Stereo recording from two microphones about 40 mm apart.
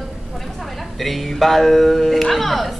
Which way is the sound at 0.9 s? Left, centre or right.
Centre.